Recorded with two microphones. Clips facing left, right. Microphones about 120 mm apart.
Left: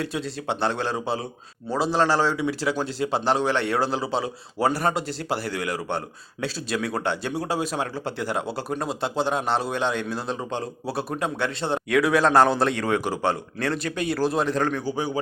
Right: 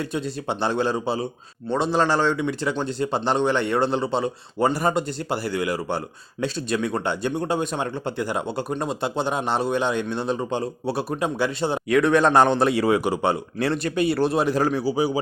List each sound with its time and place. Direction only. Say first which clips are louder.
0.0 s speech: right 1 dB; centre (ahead or behind)